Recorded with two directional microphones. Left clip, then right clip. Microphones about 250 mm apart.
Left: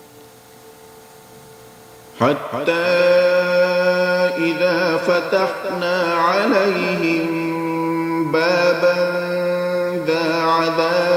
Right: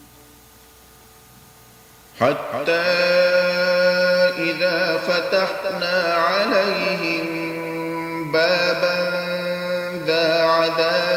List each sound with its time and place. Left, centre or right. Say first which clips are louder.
2.1 s mantra: left 1 dB; centre